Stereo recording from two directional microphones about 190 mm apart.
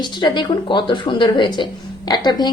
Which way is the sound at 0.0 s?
25° left (ahead or behind).